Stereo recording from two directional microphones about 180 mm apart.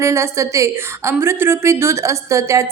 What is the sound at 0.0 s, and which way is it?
A woman's voice, 15° right (ahead or behind).